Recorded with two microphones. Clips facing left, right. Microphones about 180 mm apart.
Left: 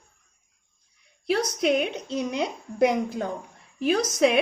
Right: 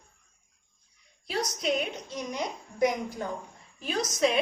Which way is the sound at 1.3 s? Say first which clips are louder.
Left 7 dB; 65° left (ahead or behind).